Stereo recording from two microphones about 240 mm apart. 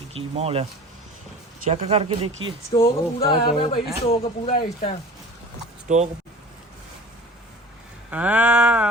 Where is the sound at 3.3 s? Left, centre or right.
Left.